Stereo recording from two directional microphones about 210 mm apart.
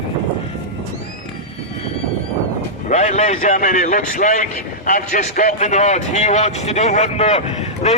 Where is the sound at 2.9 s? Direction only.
35° left (ahead or behind).